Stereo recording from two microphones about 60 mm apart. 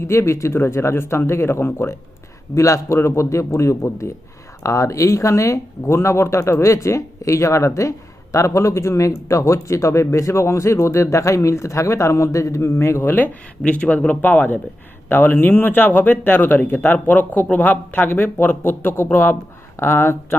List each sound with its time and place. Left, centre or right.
0.0 s speech: left
2.6 s speech: left
13.1 s speech: left